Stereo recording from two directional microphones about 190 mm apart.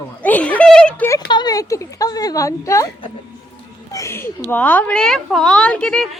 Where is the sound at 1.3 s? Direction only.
20° left (ahead or behind).